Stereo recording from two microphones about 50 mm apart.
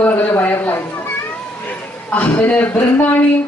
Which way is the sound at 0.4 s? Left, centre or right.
Left.